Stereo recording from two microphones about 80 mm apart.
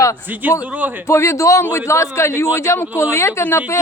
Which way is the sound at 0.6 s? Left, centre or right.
Right.